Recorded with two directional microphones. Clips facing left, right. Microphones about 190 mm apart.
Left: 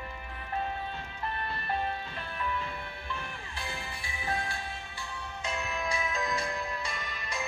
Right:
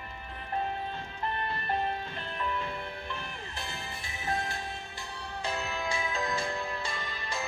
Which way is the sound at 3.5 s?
45° right (ahead or behind).